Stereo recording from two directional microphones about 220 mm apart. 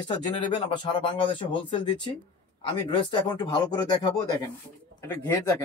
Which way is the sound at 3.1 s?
20° left (ahead or behind).